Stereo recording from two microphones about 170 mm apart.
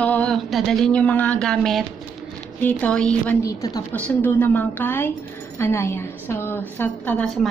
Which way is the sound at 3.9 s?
10° left (ahead or behind).